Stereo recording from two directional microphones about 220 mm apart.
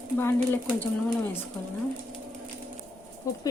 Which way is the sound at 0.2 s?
10° left (ahead or behind).